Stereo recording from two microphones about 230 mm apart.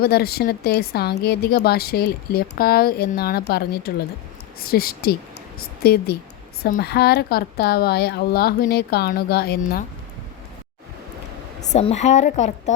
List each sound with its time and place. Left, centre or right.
0.0 s a woman's voice: left
11.7 s a woman's voice: left